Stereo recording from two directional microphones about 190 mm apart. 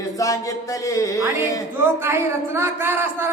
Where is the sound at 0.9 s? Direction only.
15° left (ahead or behind).